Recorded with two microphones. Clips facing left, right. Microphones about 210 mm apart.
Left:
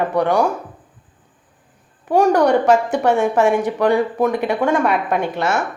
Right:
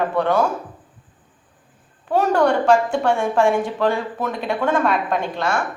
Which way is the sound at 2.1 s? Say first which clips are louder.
Left 3 dB; 15° left (ahead or behind).